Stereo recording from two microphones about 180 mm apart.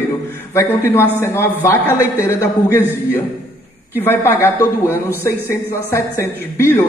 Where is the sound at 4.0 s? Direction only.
10° left (ahead or behind).